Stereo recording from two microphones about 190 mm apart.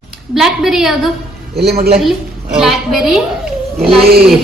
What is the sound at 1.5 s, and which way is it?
Speech, 55° right (ahead or behind).